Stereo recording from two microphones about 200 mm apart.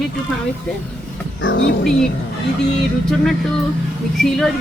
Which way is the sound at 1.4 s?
65° left (ahead or behind).